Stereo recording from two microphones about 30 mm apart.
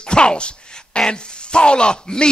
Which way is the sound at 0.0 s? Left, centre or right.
Left.